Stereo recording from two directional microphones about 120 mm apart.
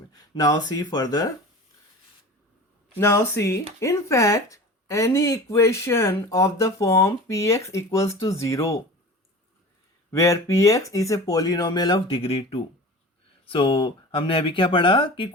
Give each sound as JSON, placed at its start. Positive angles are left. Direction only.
{"t": 0.1, "sound": "speech", "side_deg": 30}
{"t": 2.9, "sound": "speech", "side_deg": 20}
{"t": 10.1, "sound": "speech", "side_deg": 25}
{"t": 12.1, "sound": "speech", "side_deg": 50}